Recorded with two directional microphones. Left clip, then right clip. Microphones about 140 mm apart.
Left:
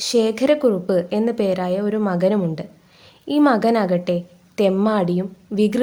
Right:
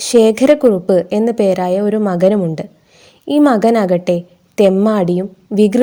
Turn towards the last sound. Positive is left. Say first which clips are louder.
# right 7 dB
turn(degrees=-40)  # may be behind; listen again after turning